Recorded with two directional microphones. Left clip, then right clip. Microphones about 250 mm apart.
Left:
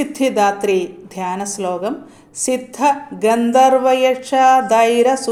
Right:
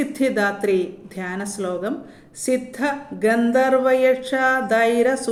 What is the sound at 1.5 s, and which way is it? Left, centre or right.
Music, left.